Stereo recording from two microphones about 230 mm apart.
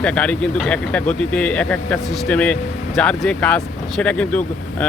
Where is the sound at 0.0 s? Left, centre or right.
Centre.